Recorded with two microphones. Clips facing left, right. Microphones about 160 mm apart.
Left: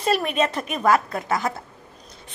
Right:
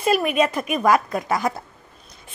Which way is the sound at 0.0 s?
10° right (ahead or behind).